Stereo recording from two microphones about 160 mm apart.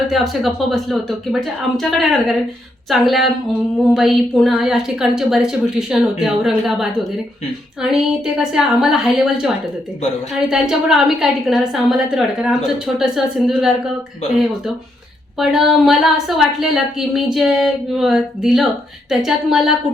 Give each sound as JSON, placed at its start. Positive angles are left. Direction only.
{"t": 0.1, "sound": "a woman's voice", "side_deg": 0}
{"t": 10.5, "sound": "a woman's voice", "side_deg": 0}
{"t": 15.4, "sound": "a woman's voice", "side_deg": 0}